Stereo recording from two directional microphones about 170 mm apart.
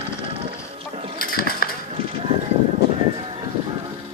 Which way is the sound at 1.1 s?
60° left (ahead or behind).